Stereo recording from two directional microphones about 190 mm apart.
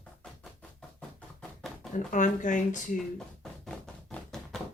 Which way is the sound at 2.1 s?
40° left (ahead or behind).